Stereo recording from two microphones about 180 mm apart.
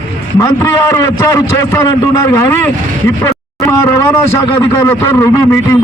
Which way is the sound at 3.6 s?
15° left (ahead or behind).